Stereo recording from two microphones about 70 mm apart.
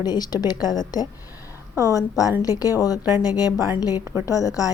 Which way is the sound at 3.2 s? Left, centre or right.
Left.